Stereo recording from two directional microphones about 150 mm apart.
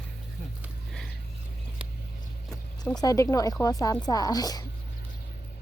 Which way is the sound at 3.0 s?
20° left (ahead or behind).